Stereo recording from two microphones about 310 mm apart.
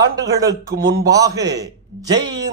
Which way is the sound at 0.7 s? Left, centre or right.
Right.